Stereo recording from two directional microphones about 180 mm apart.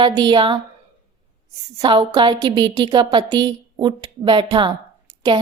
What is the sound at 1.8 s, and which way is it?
A woman's voice, 25° right (ahead or behind).